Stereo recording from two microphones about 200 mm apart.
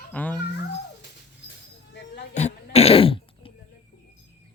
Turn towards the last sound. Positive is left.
turn(degrees=25)  # may be behind; listen again after turning